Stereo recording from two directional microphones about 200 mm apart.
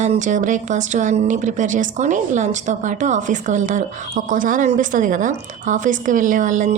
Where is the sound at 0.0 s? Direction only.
40° right (ahead or behind).